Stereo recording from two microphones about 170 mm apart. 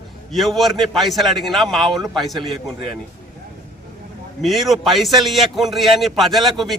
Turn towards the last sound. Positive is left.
turn(degrees=0)  # may be behind; listen again after turning